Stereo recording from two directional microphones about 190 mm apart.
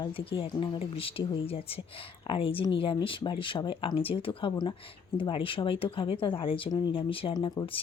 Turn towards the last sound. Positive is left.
turn(degrees=25)  # may be behind; listen again after turning